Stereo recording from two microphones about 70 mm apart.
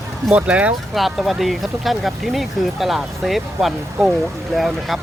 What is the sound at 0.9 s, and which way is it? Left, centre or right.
Speech, centre.